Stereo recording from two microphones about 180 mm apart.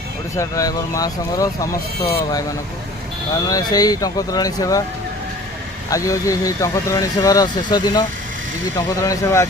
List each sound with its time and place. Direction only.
0.3 s speech: 20° left (ahead or behind)
3.5 s speech: 20° left (ahead or behind)
5.9 s speech: 20° left (ahead or behind)